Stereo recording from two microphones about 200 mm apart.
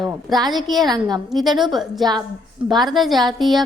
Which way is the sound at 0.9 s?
20° right (ahead or behind).